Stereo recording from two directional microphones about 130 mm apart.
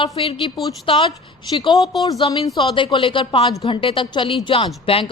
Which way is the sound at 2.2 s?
50° left (ahead or behind).